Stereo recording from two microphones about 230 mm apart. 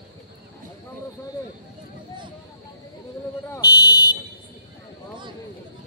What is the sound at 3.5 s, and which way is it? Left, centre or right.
Fire alarm, centre.